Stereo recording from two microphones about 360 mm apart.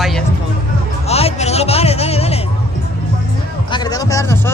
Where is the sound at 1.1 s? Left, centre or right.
Centre.